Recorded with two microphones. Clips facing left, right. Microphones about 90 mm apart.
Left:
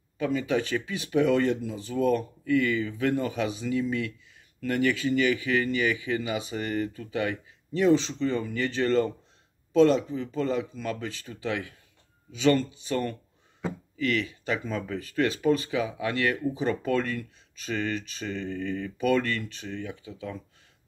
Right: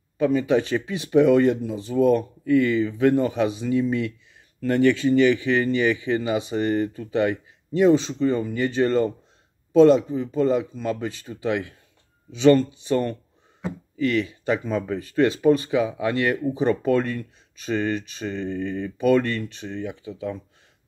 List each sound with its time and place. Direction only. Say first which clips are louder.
0.2 s speech: right 7 dB; 25° right (ahead or behind)